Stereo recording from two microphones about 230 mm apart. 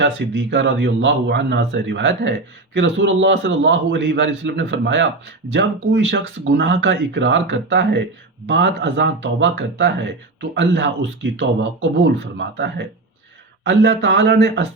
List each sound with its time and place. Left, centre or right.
0.0 s speech: right